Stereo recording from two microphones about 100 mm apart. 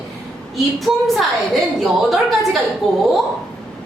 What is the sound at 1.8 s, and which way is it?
Speech, centre (ahead or behind).